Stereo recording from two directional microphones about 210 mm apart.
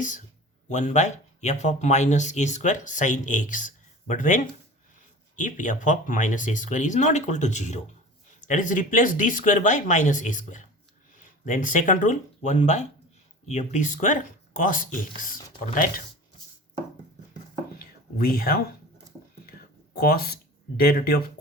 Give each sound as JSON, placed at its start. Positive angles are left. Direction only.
{"t": 0.7, "sound": "speech", "side_deg": 35}
{"t": 5.4, "sound": "speech", "side_deg": 35}
{"t": 17.7, "sound": "whispering", "side_deg": 45}
{"t": 19.5, "sound": "a sound", "side_deg": 45}
{"t": 20.7, "sound": "speech", "side_deg": 45}